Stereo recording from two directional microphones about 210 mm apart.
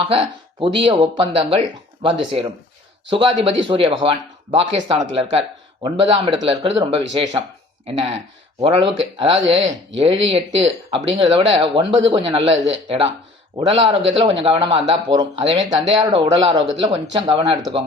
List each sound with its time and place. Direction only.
0.1 s speech: 25° right (ahead or behind)